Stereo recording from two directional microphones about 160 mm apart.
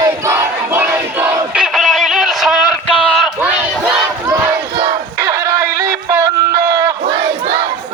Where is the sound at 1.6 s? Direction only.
Centre (ahead or behind).